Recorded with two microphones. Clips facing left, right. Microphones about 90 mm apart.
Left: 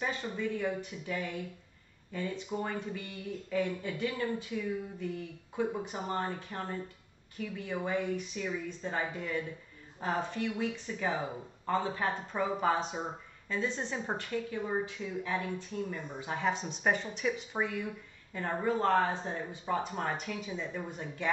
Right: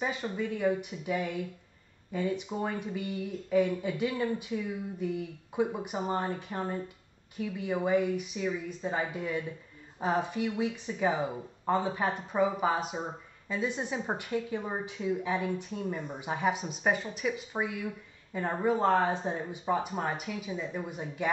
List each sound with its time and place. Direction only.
0.0 s speech: 10° right (ahead or behind)